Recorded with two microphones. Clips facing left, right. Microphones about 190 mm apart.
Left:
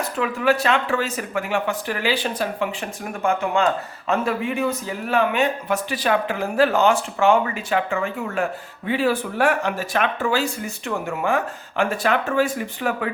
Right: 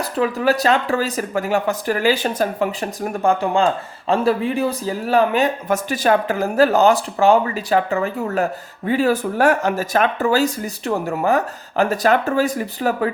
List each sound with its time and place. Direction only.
0.0 s a man's voice: 35° right (ahead or behind)